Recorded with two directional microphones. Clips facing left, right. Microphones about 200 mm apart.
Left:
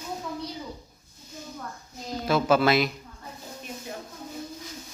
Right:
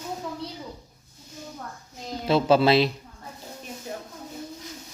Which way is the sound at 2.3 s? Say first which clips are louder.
Right 3 dB; 30° right (ahead or behind).